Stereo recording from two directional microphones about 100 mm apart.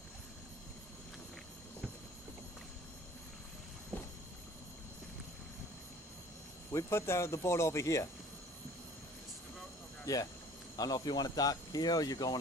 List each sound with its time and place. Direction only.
6.7 s speech: 25° left (ahead or behind)
10.1 s speech: 35° left (ahead or behind)